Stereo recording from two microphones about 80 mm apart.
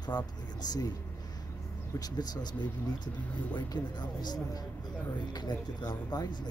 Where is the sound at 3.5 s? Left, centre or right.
Left.